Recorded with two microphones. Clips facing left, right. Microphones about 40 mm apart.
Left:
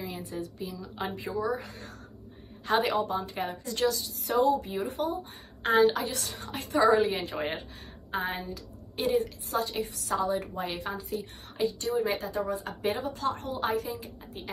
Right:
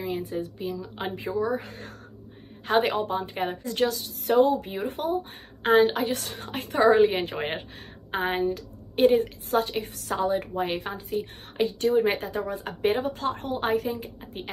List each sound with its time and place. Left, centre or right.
0.0 s a woman's voice: right
0.7 s speech: right
1.1 s a woman's voice: right